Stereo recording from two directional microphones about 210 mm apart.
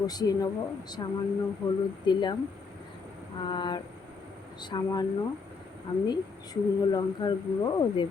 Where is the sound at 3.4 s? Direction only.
20° left (ahead or behind).